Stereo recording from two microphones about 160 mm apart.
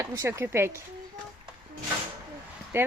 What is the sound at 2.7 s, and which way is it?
Speech, 15° right (ahead or behind).